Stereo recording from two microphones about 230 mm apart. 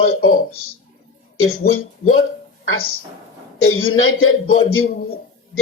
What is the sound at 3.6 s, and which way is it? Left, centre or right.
Speech, left.